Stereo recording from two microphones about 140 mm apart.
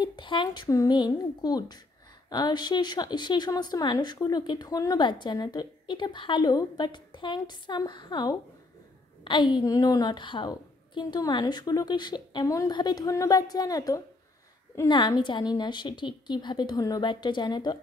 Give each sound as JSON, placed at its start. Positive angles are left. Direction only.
{"t": 0.0, "sound": "a woman's voice", "side_deg": 35}